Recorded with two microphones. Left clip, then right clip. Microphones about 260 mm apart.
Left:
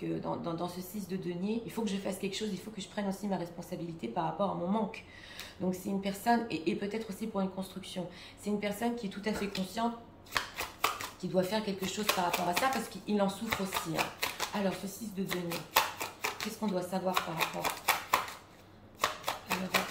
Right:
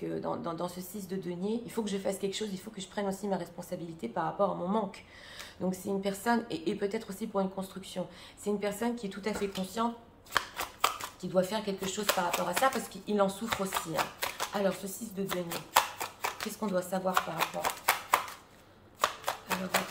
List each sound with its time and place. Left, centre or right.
0.4 s speech: centre
5.7 s speech: centre
10.3 s shuffling cards: centre
11.3 s speech: centre
15.2 s shuffling cards: centre
16.7 s speech: centre
18.9 s a sound: centre